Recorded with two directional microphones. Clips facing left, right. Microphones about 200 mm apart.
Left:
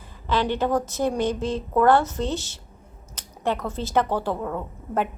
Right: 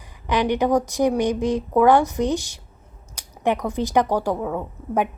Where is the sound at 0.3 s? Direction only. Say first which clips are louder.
Right 3 dB; 15° right (ahead or behind).